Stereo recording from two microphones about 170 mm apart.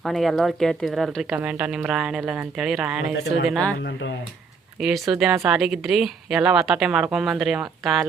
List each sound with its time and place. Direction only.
0.0 s speech: centre (ahead or behind)
3.8 s speech: 90° left
4.8 s speech: centre (ahead or behind)